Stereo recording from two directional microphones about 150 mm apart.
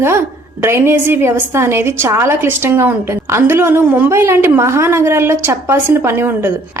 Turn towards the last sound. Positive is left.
turn(degrees=-15)  # may be behind; listen again after turning